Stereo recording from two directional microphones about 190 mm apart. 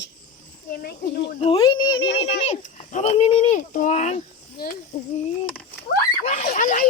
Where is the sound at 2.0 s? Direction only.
65° left (ahead or behind).